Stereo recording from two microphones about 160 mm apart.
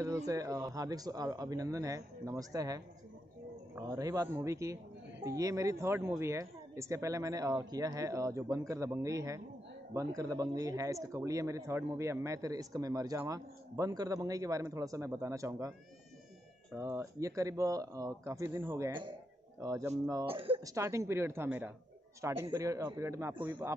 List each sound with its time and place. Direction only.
0.0 s speech: 20° right (ahead or behind)
16.7 s speech: 15° right (ahead or behind)
20.2 s speech: 35° right (ahead or behind)
20.6 s a woman's voice: 20° right (ahead or behind)